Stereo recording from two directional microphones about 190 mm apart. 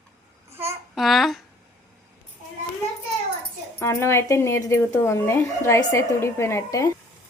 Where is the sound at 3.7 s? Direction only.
15° left (ahead or behind).